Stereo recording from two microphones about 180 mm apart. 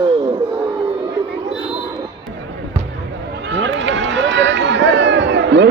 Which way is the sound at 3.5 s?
75° right (ahead or behind).